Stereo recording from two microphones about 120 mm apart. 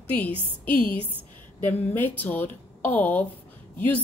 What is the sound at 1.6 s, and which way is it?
Speech, 15° left (ahead or behind).